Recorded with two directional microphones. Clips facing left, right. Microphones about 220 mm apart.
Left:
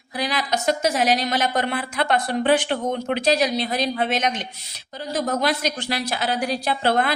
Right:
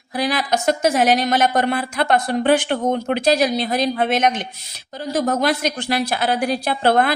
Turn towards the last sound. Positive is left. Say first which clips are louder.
# right 4 dB
turn(degrees=-55)  # may be behind; listen again after turning